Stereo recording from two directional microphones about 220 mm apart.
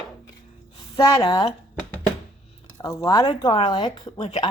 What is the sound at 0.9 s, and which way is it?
Speech, 15° left (ahead or behind).